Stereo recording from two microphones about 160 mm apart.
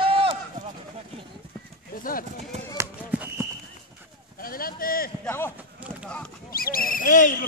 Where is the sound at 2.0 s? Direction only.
60° left (ahead or behind).